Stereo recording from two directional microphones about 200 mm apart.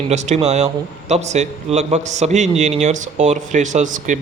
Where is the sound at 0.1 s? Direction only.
35° right (ahead or behind).